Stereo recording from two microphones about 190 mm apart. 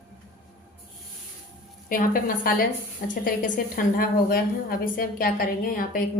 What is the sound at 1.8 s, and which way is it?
A woman's voice, 45° left (ahead or behind).